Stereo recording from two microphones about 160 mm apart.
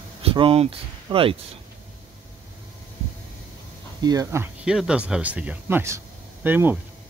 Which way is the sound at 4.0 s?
20° right (ahead or behind).